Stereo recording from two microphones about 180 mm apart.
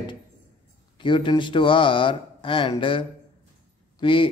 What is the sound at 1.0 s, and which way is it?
Speech, 25° left (ahead or behind).